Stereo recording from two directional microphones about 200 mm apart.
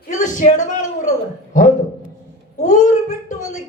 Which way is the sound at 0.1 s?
35° left (ahead or behind).